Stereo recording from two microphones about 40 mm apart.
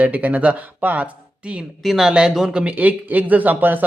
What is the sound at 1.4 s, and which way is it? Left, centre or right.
Speech, right.